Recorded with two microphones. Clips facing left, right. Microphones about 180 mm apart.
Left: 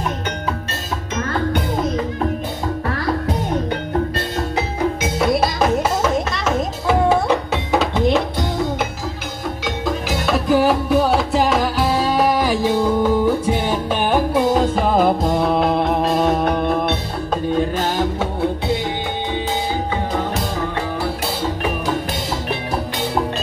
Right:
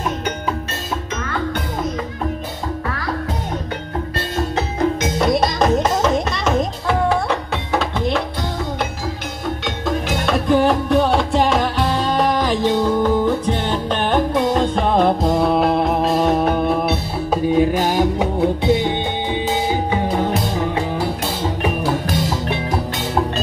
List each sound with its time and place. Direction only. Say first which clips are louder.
5.0 s music: left 2 dB; 5° left (ahead or behind)
7.1 s music: left 3 dB; 20° left (ahead or behind)
9.8 s music: right 1 dB; 5° left (ahead or behind); by 18.3 s 15° right (ahead or behind)